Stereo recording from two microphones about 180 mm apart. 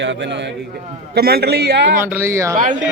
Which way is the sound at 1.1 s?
60° right (ahead or behind).